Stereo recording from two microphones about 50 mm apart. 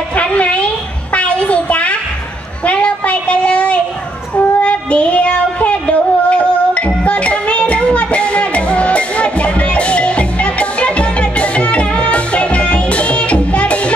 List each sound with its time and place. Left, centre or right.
0.1 s a sound: left
4.4 s child singing: left
7.1 s music: left